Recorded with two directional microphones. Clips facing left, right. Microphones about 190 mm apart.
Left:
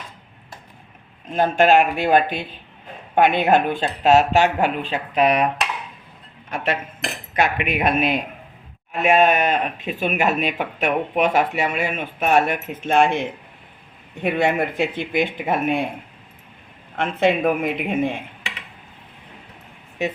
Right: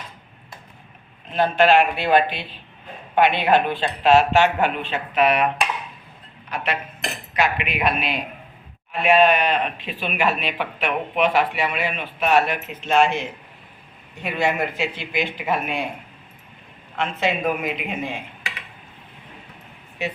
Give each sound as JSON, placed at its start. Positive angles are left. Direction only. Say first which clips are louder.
{"t": 1.3, "sound": "speech", "louder": "left 1 dB", "side_deg": 45}
{"t": 7.3, "sound": "speech", "louder": "left 2 dB", "side_deg": 50}
{"t": 17.0, "sound": "speech", "louder": "left 4 dB", "side_deg": 55}